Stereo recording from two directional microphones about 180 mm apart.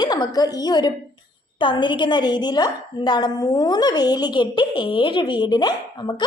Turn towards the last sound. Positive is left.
turn(degrees=25)  # may be behind; listen again after turning